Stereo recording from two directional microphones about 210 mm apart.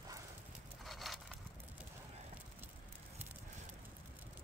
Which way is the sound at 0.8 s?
Centre (ahead or behind).